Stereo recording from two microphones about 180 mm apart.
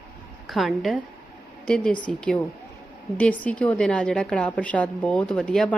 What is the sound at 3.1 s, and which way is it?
A woman's voice, 5° left (ahead or behind).